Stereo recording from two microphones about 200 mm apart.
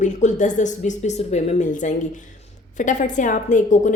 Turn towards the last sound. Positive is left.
turn(degrees=40)  # may be behind; listen again after turning